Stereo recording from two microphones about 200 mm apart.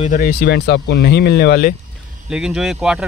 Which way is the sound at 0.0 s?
45° left (ahead or behind).